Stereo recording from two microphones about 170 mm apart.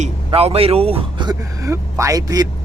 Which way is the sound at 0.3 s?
35° right (ahead or behind).